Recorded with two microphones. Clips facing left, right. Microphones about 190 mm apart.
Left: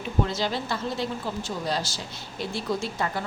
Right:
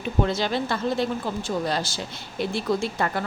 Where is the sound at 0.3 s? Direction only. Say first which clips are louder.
Right 3 dB; 60° right (ahead or behind).